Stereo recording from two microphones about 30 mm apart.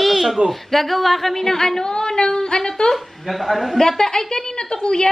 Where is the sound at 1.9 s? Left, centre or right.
Left.